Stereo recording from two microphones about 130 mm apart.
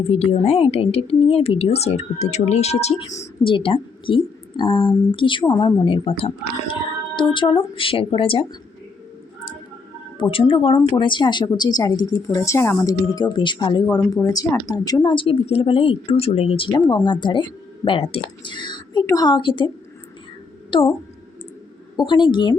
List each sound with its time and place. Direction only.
0.0 s speech: 50° left (ahead or behind)
3.4 s speech: 40° left (ahead or behind)
10.2 s speech: 45° left (ahead or behind)
16.7 s speech: 35° left (ahead or behind)
21.9 s speech: 35° left (ahead or behind)